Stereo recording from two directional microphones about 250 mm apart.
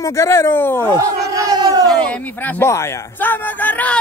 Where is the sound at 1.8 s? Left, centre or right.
Centre.